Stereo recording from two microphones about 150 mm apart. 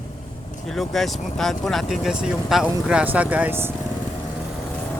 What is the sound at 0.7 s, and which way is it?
Speech, centre (ahead or behind).